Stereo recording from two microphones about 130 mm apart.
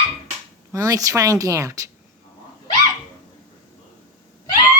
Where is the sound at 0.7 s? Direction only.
25° right (ahead or behind).